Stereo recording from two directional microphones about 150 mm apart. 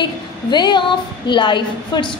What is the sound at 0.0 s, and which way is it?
A woman's voice, 30° left (ahead or behind).